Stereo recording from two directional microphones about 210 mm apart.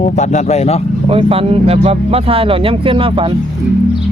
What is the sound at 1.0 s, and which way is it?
Speech, 25° right (ahead or behind).